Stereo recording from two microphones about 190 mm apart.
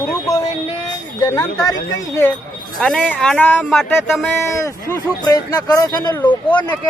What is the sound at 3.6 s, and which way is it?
Speech, centre (ahead or behind).